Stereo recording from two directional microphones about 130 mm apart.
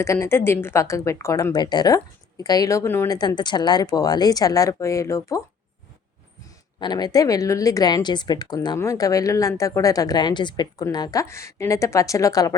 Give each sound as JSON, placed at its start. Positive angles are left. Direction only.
{"t": 0.0, "sound": "speech", "side_deg": 20}
{"t": 3.2, "sound": "speech", "side_deg": 35}
{"t": 6.7, "sound": "speech", "side_deg": 35}